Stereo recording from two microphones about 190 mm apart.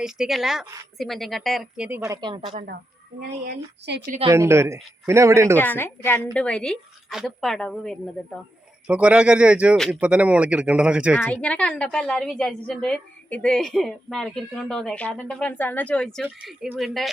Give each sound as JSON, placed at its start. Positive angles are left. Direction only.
{"t": 0.0, "sound": "a woman's voice", "side_deg": 0}
{"t": 2.0, "sound": "speech", "side_deg": -25}
{"t": 3.2, "sound": "speech", "side_deg": -55}
{"t": 4.3, "sound": "speech", "side_deg": -15}
{"t": 5.5, "sound": "a woman's voice", "side_deg": 10}
{"t": 8.9, "sound": "speech", "side_deg": -5}
{"t": 11.2, "sound": "a woman's voice", "side_deg": 10}